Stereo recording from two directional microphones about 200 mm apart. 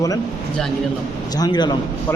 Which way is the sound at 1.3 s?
20° left (ahead or behind).